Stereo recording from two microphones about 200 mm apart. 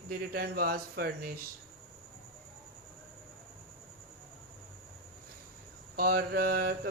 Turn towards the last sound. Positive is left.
turn(degrees=-50)  # may be behind; listen again after turning